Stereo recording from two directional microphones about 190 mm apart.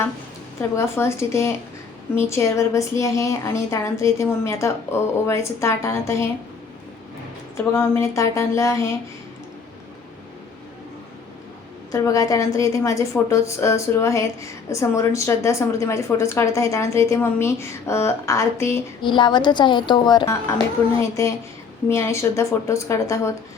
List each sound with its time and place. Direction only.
0.6 s a woman's voice: 15° left (ahead or behind)
7.5 s a woman's voice: 15° left (ahead or behind)
11.9 s a woman's voice: 15° left (ahead or behind)